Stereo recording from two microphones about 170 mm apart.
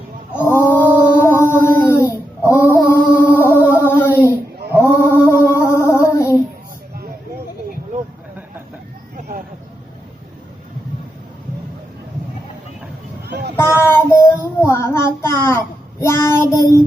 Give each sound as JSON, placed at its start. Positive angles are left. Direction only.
{"t": 0.3, "sound": "a sound", "side_deg": 15}
{"t": 13.2, "sound": "vehicle", "side_deg": -75}
{"t": 13.6, "sound": "child singing", "side_deg": 15}